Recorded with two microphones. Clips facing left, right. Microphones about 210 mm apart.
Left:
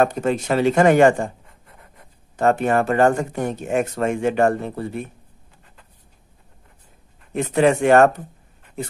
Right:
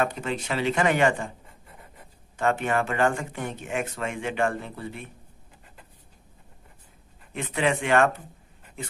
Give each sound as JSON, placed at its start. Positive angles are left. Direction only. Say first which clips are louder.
{"t": 0.0, "sound": "speech", "louder": "left 8 dB", "side_deg": 45}
{"t": 1.7, "sound": "rub", "louder": "even", "side_deg": 0}
{"t": 2.3, "sound": "speech", "louder": "left 7 dB", "side_deg": 40}
{"t": 7.3, "sound": "speech", "louder": "left 9 dB", "side_deg": 45}